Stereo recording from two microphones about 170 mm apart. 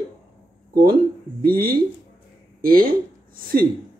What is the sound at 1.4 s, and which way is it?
Speech, 60° right (ahead or behind).